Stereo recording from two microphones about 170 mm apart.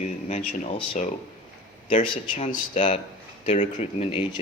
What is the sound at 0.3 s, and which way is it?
Speech, 45° left (ahead or behind).